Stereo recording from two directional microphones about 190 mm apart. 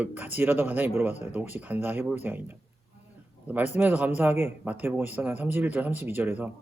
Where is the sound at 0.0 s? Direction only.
10° right (ahead or behind).